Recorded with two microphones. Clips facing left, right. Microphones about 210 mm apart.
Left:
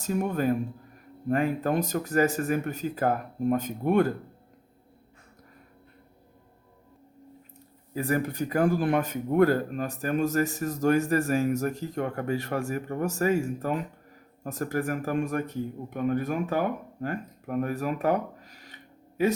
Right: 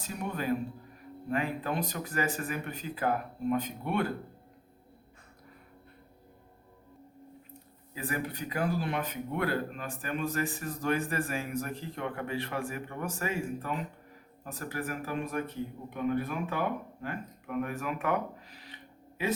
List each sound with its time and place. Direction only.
0.0 s speech: 45° left (ahead or behind)
7.9 s speech: 45° left (ahead or behind)